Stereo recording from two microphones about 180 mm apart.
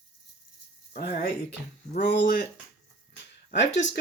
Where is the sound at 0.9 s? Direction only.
65° left (ahead or behind).